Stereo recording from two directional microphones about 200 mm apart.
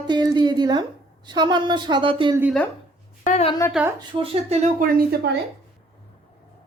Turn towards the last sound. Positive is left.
turn(degrees=-45)  # may be behind; listen again after turning